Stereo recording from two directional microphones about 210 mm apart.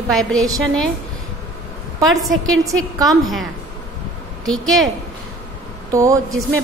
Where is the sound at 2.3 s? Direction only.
70° right (ahead or behind).